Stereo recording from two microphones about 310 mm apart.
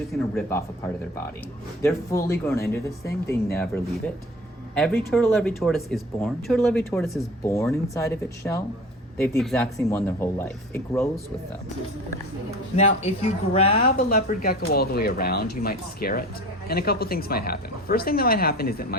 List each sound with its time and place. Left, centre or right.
0.1 s speech: centre
1.8 s speech: centre
4.7 s speech: centre
12.7 s speech: left